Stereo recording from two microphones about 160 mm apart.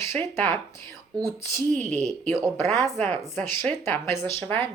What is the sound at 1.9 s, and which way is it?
Speech, 5° left (ahead or behind).